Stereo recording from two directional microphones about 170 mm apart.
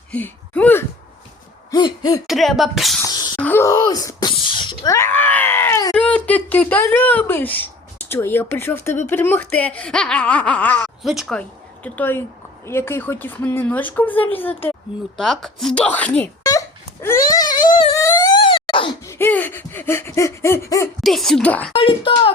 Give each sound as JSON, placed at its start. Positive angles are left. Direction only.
{"t": 0.1, "sound": "speech", "side_deg": 10}
{"t": 1.7, "sound": "hoot", "side_deg": 25}
{"t": 2.2, "sound": "speech", "side_deg": 0}
{"t": 3.0, "sound": "a sound", "side_deg": 25}
{"t": 3.4, "sound": "sneeze", "side_deg": 15}
{"t": 5.9, "sound": "speech", "side_deg": 5}
{"t": 16.4, "sound": "a sound", "side_deg": 20}
{"t": 18.4, "sound": "wail", "side_deg": 30}
{"t": 19.0, "sound": "speech", "side_deg": 10}
{"t": 21.0, "sound": "speech", "side_deg": 0}
{"t": 21.7, "sound": "speech", "side_deg": 30}